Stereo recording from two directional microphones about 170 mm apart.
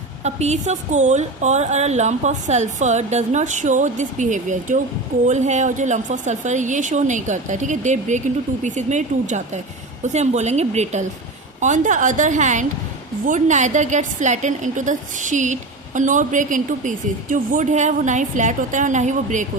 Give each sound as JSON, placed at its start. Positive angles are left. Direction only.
{"t": 0.3, "sound": "a woman's voice", "side_deg": -40}